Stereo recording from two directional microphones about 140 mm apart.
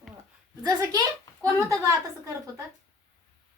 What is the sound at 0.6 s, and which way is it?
A woman's voice, 25° right (ahead or behind).